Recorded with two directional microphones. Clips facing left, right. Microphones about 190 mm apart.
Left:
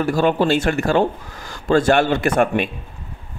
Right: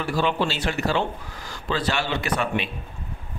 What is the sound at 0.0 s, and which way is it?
Speech, 45° left (ahead or behind).